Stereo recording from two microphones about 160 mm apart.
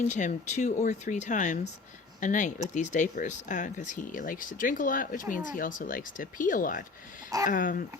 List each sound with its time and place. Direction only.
0.1 s speech: 50° left (ahead or behind)